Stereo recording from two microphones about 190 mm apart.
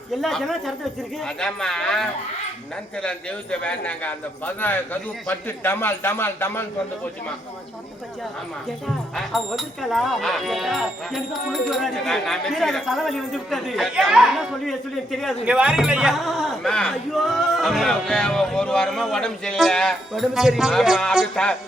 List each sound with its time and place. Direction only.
0.2 s a man's voice: centre (ahead or behind)
9.1 s speech: centre (ahead or behind)